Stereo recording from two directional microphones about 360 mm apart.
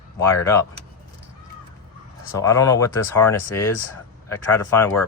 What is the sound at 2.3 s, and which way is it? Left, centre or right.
Speech, centre.